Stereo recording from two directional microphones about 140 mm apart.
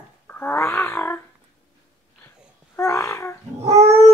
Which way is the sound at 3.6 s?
50° right (ahead or behind).